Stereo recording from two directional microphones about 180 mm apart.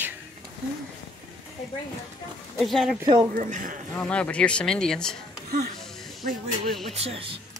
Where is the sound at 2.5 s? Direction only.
Centre (ahead or behind).